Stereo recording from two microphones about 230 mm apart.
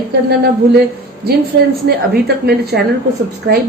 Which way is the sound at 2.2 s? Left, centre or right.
Right.